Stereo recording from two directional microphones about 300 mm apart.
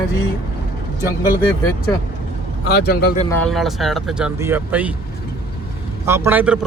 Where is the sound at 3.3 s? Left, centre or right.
Centre.